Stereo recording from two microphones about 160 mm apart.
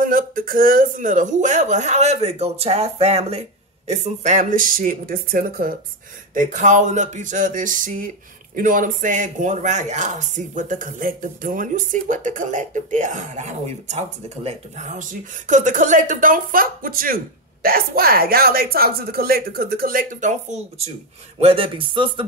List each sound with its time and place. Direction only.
0.0 s speech: 60° right (ahead or behind)
6.3 s speech: 50° right (ahead or behind); by 22.2 s 30° right (ahead or behind)